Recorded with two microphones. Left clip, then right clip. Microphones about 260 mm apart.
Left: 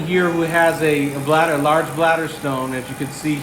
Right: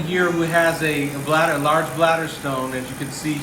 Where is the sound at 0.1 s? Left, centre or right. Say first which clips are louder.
Left 1 dB; left.